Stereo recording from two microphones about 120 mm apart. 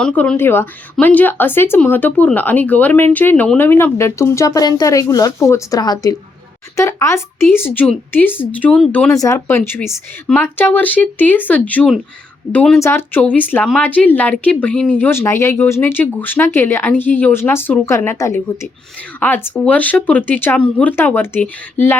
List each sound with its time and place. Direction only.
0.0 s speech: 10° left (ahead or behind)
9.1 s speech: 25° left (ahead or behind)